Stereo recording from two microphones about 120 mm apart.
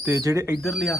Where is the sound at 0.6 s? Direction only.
Centre (ahead or behind).